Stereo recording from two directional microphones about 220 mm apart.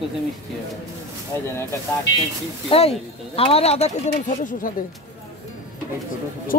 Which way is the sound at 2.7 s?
25° left (ahead or behind).